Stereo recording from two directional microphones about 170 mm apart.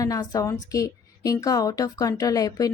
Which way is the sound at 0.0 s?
20° left (ahead or behind).